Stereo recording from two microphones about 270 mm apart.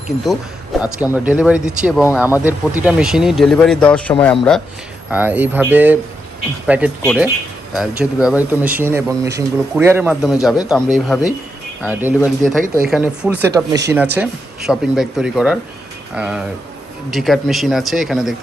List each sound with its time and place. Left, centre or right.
0.8 s speech: centre
5.1 s speech: centre
10.6 s speech: centre
10.8 s speech: centre
12.6 s speech: right
12.9 s speech: centre